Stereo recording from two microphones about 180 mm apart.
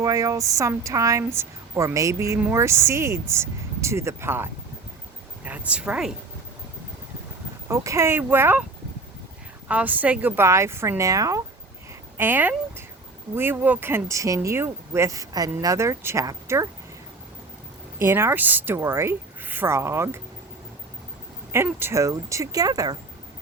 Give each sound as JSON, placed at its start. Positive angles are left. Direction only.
{"t": 0.0, "sound": "a woman's voice", "side_deg": -20}
{"t": 5.5, "sound": "a woman's voice", "side_deg": -5}
{"t": 7.7, "sound": "a woman's voice", "side_deg": -15}
{"t": 9.6, "sound": "a woman's voice", "side_deg": -10}
{"t": 18.0, "sound": "a woman's voice", "side_deg": -15}
{"t": 21.5, "sound": "a woman's voice", "side_deg": -15}